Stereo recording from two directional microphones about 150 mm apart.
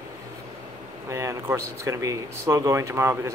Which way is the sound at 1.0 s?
20° right (ahead or behind).